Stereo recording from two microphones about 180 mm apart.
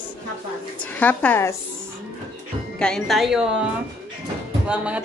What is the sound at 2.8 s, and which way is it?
Speech, centre (ahead or behind).